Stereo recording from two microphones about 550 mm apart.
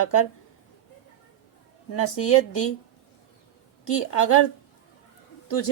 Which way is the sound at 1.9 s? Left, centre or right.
Left.